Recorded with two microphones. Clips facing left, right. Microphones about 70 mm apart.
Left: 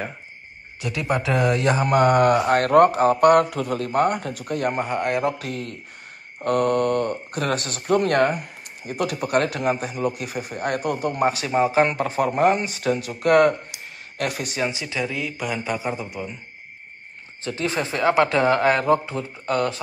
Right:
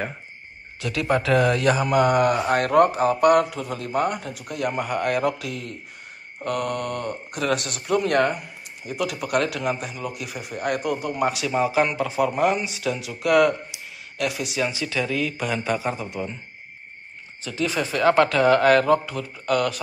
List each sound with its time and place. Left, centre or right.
0.7 s speech: centre
1.8 s speech: left
4.7 s a man's voice: left
5.4 s speech: left
11.2 s speech: left
13.7 s a sound: left
14.6 s a man's voice: left; by 16.3 s centre
17.4 s speech: left
18.0 s a man's voice: centre